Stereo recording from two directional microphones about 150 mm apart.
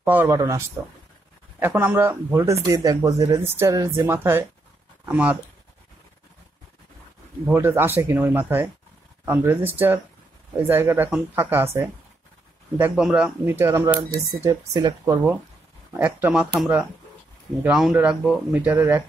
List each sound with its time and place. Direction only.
0.0 s speech: 10° right (ahead or behind)
7.4 s speech: 15° right (ahead or behind)
15.9 s speech: 15° right (ahead or behind)